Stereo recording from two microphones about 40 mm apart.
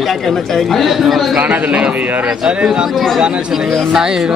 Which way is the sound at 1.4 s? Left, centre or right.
Right.